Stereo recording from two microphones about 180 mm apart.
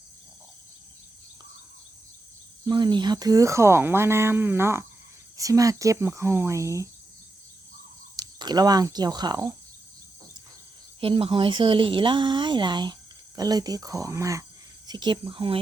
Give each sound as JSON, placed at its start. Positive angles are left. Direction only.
{"t": 2.6, "sound": "speech", "side_deg": -25}
{"t": 8.1, "sound": "speech", "side_deg": -25}
{"t": 11.0, "sound": "speech", "side_deg": -30}